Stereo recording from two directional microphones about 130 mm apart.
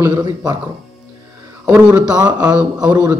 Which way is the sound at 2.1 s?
30° right (ahead or behind).